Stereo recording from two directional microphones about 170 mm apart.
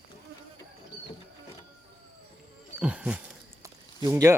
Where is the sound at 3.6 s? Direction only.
20° right (ahead or behind).